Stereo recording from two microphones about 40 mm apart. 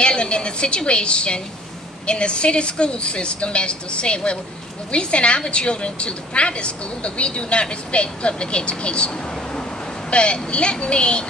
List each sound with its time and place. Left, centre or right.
0.0 s a woman's voice: left